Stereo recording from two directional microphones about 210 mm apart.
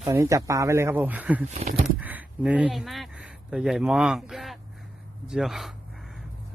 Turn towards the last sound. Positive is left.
turn(degrees=0)  # may be behind; listen again after turning